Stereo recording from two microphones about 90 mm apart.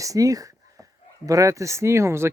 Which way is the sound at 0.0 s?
40° right (ahead or behind).